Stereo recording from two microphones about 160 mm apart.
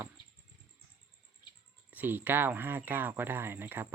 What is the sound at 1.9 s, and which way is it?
Speech, 10° right (ahead or behind).